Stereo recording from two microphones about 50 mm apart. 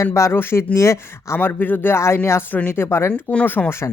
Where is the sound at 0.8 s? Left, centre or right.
Left.